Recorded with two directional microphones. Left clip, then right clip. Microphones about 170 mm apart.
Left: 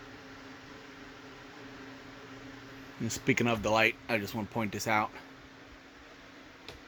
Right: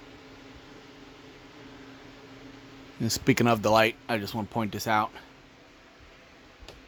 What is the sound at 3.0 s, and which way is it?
Speech, 35° right (ahead or behind).